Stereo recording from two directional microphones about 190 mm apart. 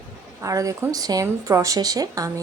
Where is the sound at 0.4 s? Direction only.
15° right (ahead or behind).